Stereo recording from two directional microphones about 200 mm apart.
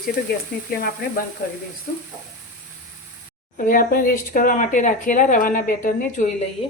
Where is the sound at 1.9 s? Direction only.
45° left (ahead or behind).